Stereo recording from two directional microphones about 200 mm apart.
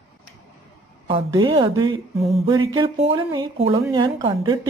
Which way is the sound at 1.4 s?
20° right (ahead or behind).